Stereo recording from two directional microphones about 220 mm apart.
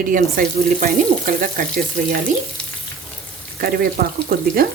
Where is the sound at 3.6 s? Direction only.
40° right (ahead or behind).